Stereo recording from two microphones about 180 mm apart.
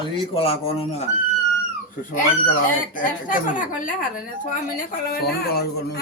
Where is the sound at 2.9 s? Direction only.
50° left (ahead or behind).